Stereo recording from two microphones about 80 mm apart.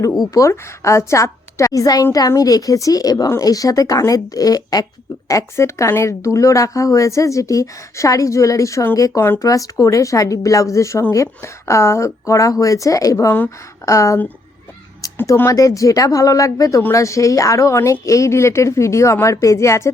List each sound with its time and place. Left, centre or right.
0.3 s speech: left
5.3 s speech: left
15.4 s speech: left